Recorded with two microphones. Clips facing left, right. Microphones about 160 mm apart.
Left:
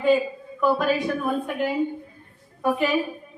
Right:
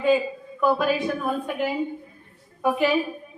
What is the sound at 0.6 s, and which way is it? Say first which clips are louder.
A woman's voice: even; 5° right (ahead or behind).